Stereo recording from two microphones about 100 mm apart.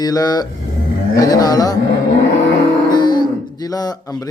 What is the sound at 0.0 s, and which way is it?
Speech, 40° left (ahead or behind).